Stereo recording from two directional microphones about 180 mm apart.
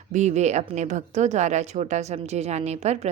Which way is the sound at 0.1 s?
40° right (ahead or behind).